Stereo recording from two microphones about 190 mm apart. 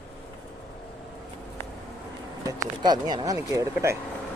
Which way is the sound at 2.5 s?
20° right (ahead or behind).